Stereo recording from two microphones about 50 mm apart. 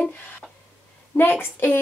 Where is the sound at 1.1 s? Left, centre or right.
Left.